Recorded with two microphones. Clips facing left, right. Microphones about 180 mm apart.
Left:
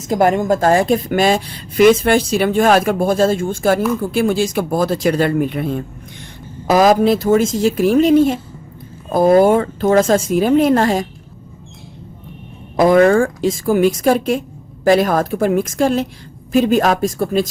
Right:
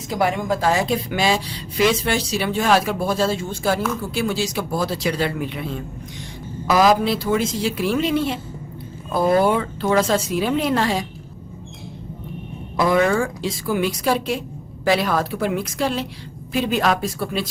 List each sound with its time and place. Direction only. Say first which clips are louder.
0.1 s a woman's voice: left 7 dB; 45° left (ahead or behind)
12.7 s a woman's voice: left 7 dB; 50° left (ahead or behind)